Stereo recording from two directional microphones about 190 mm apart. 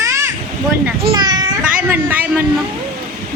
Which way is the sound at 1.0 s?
20° right (ahead or behind).